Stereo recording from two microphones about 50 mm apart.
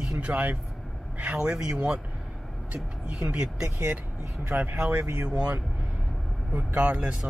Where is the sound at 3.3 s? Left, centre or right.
Right.